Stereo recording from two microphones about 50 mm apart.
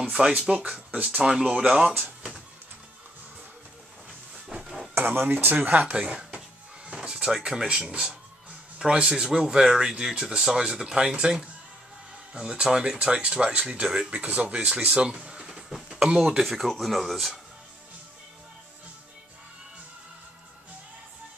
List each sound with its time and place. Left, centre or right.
0.0 s speech: centre
4.9 s speech: right
5.9 s speech: centre
14.9 s a sound: centre
16.2 s speech: centre